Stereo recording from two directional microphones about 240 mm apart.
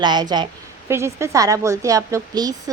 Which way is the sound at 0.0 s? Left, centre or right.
Centre.